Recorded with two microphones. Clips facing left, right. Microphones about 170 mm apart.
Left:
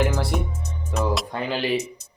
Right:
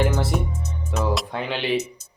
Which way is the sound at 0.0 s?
Centre (ahead or behind).